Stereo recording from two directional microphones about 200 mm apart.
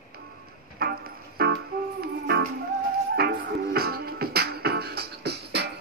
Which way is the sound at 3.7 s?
50° right (ahead or behind).